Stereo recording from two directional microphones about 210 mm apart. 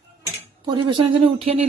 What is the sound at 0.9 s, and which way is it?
Speech, 25° right (ahead or behind).